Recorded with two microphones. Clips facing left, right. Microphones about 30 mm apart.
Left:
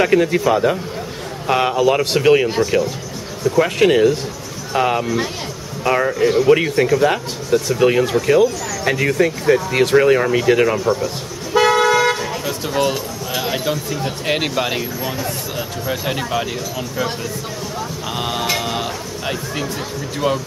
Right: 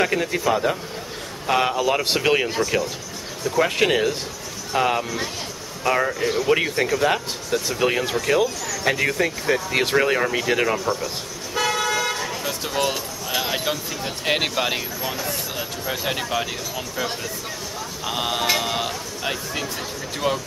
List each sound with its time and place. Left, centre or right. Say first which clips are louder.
0.0 s a man's voice: left 6 dB; centre
11.5 s toot: left 9 dB; left
12.2 s speech: left 4 dB; centre